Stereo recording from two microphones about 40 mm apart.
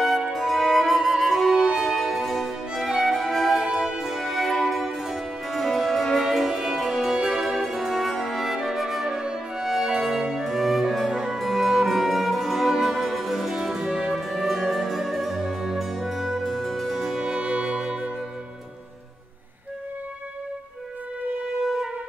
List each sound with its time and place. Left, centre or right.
0.3 s music: centre
2.7 s violin: centre
3.6 s music: centre
4.0 s music: centre
4.6 s music: centre
9.0 s music: centre
9.6 s music: centre
17.2 s music: right